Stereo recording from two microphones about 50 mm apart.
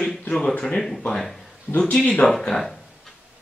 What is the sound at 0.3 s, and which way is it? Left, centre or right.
Speech, centre.